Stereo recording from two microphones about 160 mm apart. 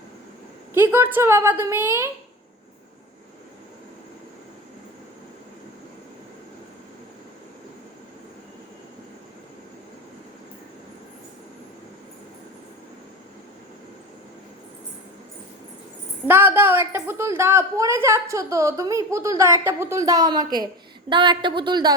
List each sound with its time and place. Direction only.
0.7 s a woman's voice: 15° right (ahead or behind)
16.2 s a woman's voice: 15° right (ahead or behind)